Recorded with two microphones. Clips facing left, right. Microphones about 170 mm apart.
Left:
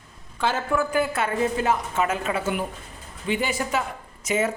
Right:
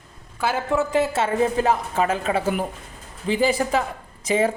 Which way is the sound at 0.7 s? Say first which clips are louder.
Right 4 dB; 20° right (ahead or behind).